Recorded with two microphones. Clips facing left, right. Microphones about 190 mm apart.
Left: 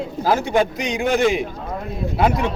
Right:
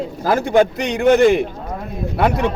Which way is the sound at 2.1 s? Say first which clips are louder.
Right 2 dB; 60° right (ahead or behind).